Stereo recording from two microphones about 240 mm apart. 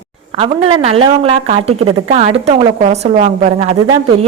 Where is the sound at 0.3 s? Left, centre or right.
Right.